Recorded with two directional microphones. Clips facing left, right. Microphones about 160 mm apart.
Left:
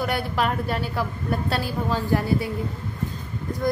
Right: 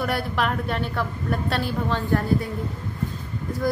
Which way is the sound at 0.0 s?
5° left (ahead or behind).